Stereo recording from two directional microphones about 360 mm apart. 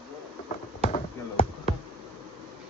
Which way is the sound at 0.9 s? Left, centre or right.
Centre.